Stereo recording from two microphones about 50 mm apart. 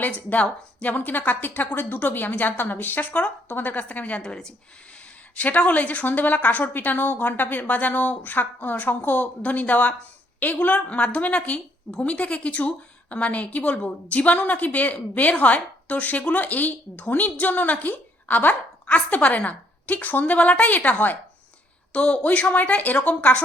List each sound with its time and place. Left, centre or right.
0.0 s a woman's voice: left
4.2 s speech: centre
5.4 s a woman's voice: left
21.9 s a woman's voice: left